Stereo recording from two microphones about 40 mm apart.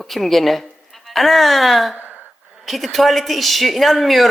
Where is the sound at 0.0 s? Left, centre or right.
Centre.